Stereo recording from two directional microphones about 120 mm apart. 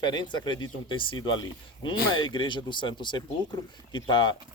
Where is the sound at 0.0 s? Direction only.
40° left (ahead or behind).